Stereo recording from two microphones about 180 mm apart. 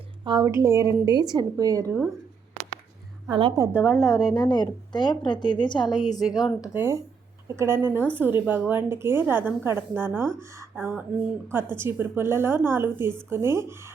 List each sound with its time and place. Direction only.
0.3 s a woman's voice: 20° right (ahead or behind)
3.2 s a woman's voice: 25° right (ahead or behind)
3.8 s speech: 5° right (ahead or behind)
4.4 s a woman's voice: 25° left (ahead or behind)
6.7 s a woman's voice: 15° right (ahead or behind)